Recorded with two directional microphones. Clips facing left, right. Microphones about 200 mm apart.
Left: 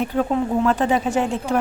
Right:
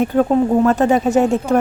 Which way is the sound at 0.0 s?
45° right (ahead or behind).